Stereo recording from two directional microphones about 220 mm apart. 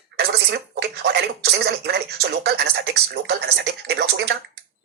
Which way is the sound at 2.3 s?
50° right (ahead or behind).